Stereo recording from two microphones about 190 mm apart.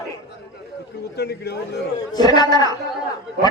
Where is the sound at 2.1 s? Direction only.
20° left (ahead or behind).